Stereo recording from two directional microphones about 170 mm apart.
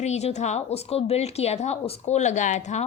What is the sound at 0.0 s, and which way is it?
A woman's voice, 40° left (ahead or behind).